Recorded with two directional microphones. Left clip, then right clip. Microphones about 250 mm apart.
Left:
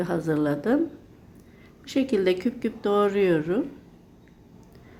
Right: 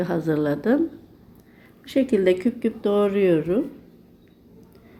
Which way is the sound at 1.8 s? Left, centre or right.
Centre.